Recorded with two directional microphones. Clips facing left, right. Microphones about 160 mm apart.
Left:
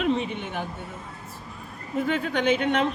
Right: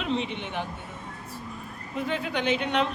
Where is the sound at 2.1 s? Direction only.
50° left (ahead or behind).